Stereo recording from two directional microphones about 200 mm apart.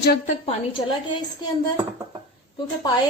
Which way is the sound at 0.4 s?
25° left (ahead or behind).